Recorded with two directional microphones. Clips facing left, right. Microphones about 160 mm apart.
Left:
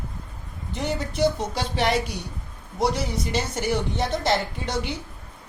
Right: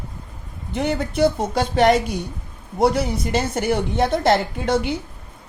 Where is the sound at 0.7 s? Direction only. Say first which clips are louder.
Right 6 dB; 60° right (ahead or behind).